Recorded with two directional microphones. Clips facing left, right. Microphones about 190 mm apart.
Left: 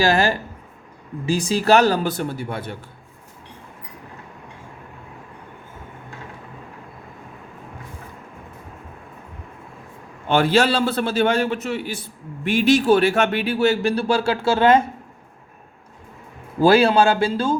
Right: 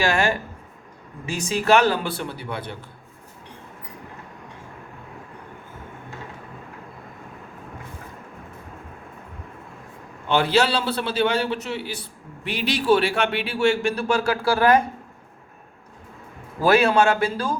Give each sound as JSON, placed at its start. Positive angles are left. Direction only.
{"t": 0.0, "sound": "speech", "side_deg": 35}
{"t": 10.2, "sound": "a man's voice", "side_deg": 50}
{"t": 16.6, "sound": "a man's voice", "side_deg": 30}